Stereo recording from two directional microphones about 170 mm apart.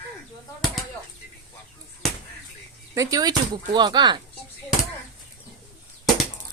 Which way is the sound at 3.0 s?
20° right (ahead or behind).